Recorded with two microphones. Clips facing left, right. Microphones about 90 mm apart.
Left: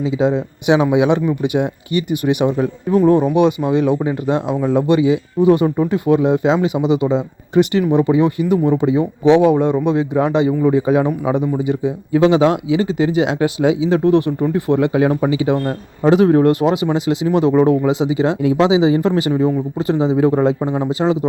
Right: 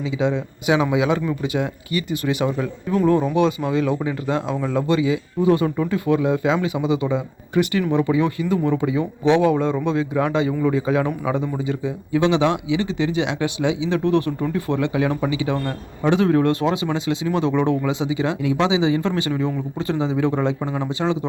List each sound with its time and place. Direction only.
0.0 s speech: 35° left (ahead or behind)
0.8 s speech: 20° left (ahead or behind)
12.1 s speech: 35° left (ahead or behind)